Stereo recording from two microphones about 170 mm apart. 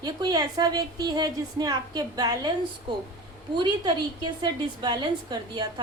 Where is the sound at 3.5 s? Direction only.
25° right (ahead or behind).